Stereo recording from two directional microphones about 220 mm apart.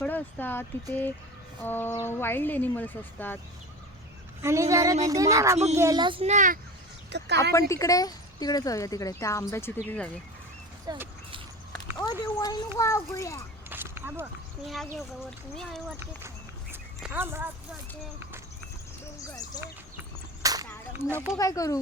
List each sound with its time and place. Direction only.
0.0 s speech: 10° left (ahead or behind)
4.4 s a woman's voice: 15° right (ahead or behind); by 6.6 s 35° right (ahead or behind)
7.1 s speech: 50° right (ahead or behind)
7.7 s speech: 15° left (ahead or behind)
10.8 s speech: 10° right (ahead or behind)
11.7 s a child's voice: 15° left (ahead or behind)
13.7 s a sound: 10° right (ahead or behind)
14.9 s speech: centre (ahead or behind)
16.7 s dog: 10° right (ahead or behind)
19.3 s speech: 15° left (ahead or behind)
20.4 s whip: 15° right (ahead or behind)
21.0 s speech: 10° left (ahead or behind)